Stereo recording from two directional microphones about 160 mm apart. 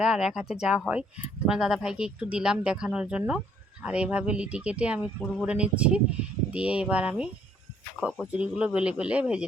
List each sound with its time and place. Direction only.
0.0 s speech: 5° right (ahead or behind)
8.3 s speech: 5° right (ahead or behind)